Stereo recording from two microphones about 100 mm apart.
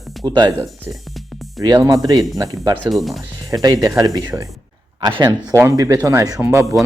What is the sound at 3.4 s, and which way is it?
Speech, 35° right (ahead or behind).